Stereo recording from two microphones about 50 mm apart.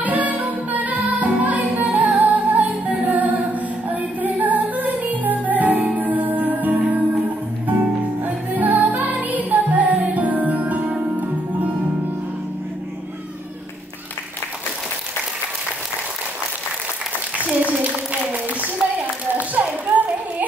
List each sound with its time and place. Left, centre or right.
0.0 s music: right
8.2 s music: right
17.6 s a sound: right